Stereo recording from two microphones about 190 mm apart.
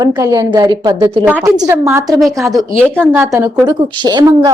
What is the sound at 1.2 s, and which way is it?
Speech, 10° right (ahead or behind).